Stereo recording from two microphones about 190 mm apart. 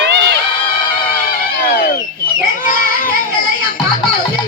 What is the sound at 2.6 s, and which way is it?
Children playing, 45° left (ahead or behind).